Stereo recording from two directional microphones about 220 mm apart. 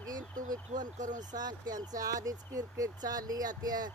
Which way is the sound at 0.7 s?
35° right (ahead or behind).